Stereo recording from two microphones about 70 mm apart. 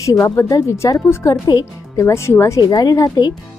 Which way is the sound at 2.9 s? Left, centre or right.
Left.